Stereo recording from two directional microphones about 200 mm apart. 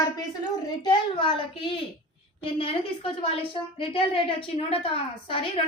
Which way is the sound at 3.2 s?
30° left (ahead or behind).